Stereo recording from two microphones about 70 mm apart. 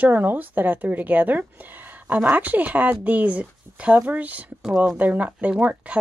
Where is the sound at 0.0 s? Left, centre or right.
Right.